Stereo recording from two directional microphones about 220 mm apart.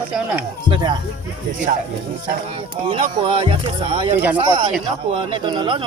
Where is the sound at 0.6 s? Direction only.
20° right (ahead or behind).